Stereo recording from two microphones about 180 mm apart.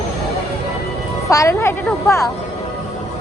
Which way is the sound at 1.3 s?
15° left (ahead or behind).